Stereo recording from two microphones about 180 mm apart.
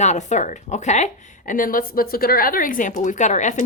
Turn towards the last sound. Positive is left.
turn(degrees=40)  # may be behind; listen again after turning